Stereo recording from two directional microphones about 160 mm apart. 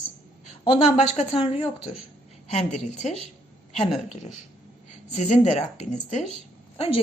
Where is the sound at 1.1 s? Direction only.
40° left (ahead or behind).